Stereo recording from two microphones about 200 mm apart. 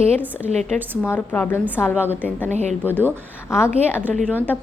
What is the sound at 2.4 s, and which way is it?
Speech, 35° right (ahead or behind).